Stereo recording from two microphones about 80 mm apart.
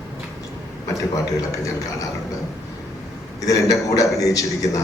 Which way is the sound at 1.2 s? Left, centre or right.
Left.